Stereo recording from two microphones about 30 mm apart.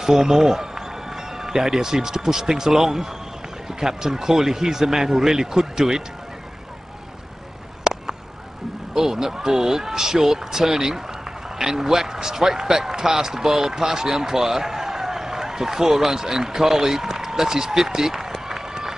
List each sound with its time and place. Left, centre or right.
0.0 s speech: centre
7.8 s a sound: centre
8.9 s a man's voice: centre